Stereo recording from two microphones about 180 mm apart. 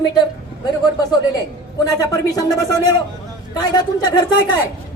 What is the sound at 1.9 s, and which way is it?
Speech, 20° left (ahead or behind).